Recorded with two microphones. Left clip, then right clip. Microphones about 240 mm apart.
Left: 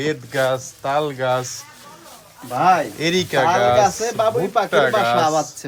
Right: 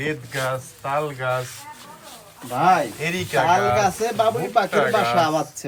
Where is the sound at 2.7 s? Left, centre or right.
Centre.